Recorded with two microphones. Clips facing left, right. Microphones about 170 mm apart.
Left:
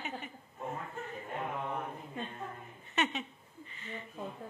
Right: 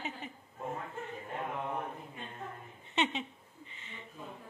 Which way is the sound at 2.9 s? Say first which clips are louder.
Right 1 dB; 25° right (ahead or behind).